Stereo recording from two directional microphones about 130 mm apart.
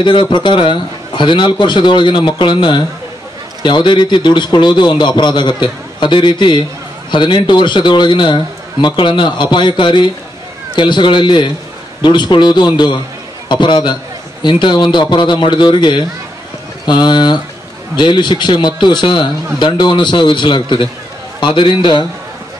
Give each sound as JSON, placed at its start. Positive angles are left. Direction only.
{"t": 0.0, "sound": "a man's voice", "side_deg": 40}